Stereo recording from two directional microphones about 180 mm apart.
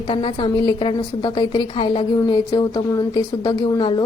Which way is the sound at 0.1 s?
30° left (ahead or behind).